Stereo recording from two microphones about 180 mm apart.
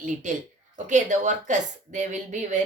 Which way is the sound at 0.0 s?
45° right (ahead or behind).